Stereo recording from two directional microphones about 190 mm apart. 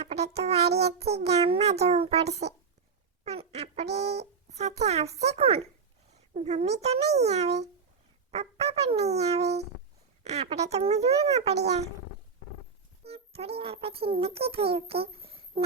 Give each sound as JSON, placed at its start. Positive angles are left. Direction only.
{"t": 0.0, "sound": "speech", "side_deg": -35}
{"t": 0.7, "sound": "music", "side_deg": -60}
{"t": 0.9, "sound": "a child's voice", "side_deg": -35}
{"t": 13.1, "sound": "a child's voice", "side_deg": -30}